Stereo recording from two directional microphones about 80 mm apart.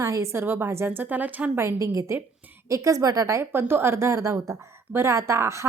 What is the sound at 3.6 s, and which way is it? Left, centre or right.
Speech, right.